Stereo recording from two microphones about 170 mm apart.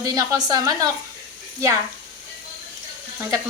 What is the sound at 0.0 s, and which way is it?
Speech, 20° right (ahead or behind).